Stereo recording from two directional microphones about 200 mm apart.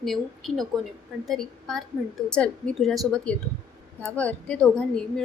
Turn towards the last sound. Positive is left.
turn(degrees=5)  # may be behind; listen again after turning